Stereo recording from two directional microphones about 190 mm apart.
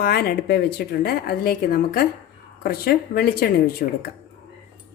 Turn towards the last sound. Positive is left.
turn(degrees=50)  # may be behind; listen again after turning